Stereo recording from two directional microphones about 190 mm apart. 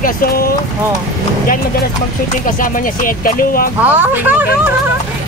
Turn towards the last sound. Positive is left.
turn(degrees=-10)  # may be behind; listen again after turning